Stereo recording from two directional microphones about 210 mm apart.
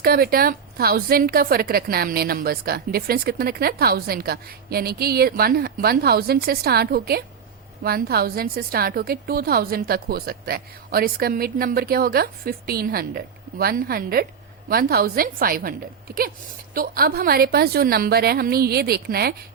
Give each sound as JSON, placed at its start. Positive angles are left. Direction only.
{"t": 0.0, "sound": "a woman's voice", "side_deg": -45}
{"t": 16.7, "sound": "a woman's voice", "side_deg": -45}